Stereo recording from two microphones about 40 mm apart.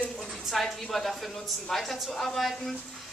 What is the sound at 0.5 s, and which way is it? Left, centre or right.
Speech, centre.